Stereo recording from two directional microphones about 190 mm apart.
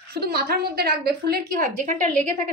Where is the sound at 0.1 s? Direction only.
55° right (ahead or behind).